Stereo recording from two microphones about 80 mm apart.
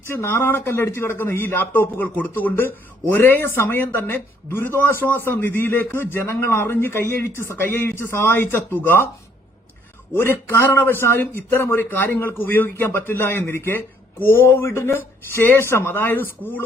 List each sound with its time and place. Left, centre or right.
0.1 s a man's voice: left
10.2 s a man's voice: left